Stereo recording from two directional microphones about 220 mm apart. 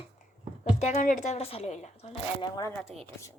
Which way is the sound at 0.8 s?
35° left (ahead or behind).